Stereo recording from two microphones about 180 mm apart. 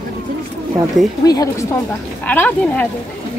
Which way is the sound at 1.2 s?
20° left (ahead or behind).